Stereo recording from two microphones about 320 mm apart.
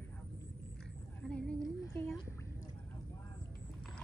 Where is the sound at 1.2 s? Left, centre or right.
Centre.